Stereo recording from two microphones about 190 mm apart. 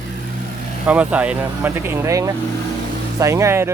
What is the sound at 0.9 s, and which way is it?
Speech, 5° right (ahead or behind).